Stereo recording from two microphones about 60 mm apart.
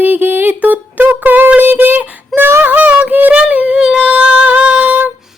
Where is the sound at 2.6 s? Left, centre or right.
Right.